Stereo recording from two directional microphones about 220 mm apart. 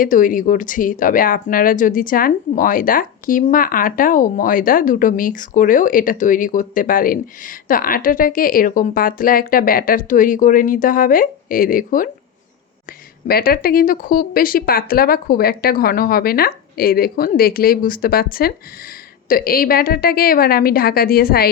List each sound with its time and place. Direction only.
0.0 s a woman's voice: 40° left (ahead or behind)
13.2 s a woman's voice: 45° left (ahead or behind)